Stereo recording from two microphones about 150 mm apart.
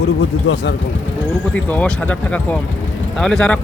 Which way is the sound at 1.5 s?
10° left (ahead or behind).